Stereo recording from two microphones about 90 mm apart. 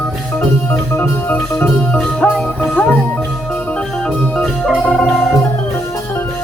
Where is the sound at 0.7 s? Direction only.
20° left (ahead or behind).